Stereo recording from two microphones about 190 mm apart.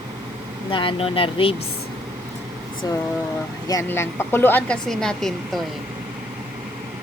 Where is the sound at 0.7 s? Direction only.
30° left (ahead or behind).